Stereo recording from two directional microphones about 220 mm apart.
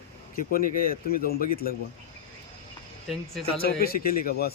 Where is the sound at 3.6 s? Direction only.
40° left (ahead or behind).